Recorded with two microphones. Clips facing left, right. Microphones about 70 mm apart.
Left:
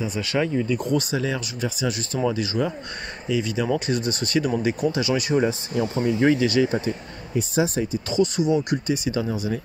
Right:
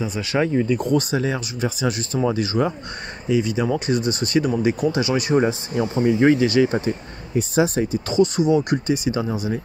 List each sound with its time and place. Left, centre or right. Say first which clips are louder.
0.0 s speech: right 2 dB; right
0.6 s speech: right 3 dB; right
3.3 s speech: right 3 dB; right
7.5 s speech: right 4 dB; right
8.1 s speech: right 3 dB; right